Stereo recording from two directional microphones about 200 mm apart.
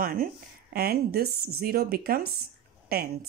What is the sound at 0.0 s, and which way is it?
Speech, 45° right (ahead or behind).